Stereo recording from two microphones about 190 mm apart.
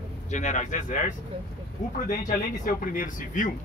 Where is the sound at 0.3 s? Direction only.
40° left (ahead or behind).